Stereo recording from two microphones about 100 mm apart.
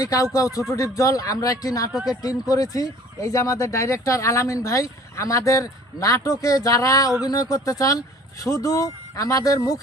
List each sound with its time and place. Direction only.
0.0 s speech: 35° left (ahead or behind)
1.9 s speech: 5° right (ahead or behind)
2.5 s speech: 35° left (ahead or behind)